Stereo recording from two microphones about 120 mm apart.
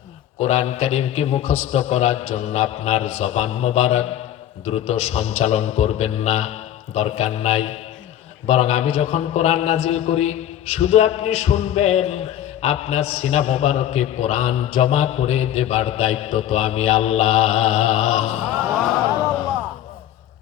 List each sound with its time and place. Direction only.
0.4 s a man's voice: 60° left (ahead or behind)